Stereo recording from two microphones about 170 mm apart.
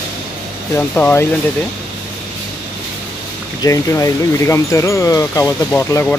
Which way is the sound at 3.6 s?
20° left (ahead or behind).